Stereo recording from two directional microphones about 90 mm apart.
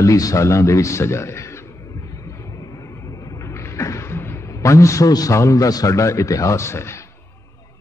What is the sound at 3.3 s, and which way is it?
A man's voice, 35° left (ahead or behind).